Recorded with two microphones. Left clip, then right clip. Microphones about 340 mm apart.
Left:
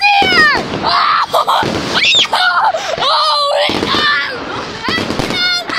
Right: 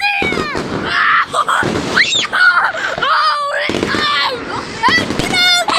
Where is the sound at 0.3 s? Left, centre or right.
Left.